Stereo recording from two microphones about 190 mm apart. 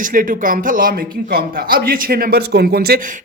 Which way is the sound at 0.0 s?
45° right (ahead or behind).